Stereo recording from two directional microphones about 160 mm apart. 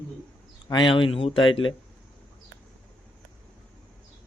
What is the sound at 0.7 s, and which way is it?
Speech, 30° left (ahead or behind).